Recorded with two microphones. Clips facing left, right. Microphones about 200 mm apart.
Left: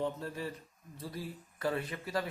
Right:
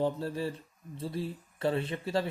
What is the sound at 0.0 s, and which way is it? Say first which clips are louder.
Speech: right 5 dB; 30° right (ahead or behind).